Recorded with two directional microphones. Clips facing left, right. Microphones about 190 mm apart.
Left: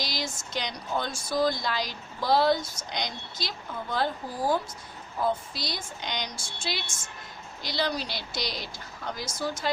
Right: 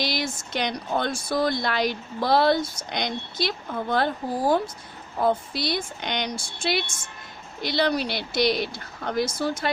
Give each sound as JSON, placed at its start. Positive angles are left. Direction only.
{"t": 0.0, "sound": "speech", "side_deg": -60}